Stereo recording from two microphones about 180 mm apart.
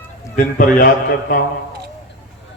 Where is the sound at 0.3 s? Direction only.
50° left (ahead or behind).